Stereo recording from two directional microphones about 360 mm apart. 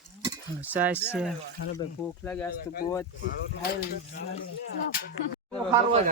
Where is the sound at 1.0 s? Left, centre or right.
Centre.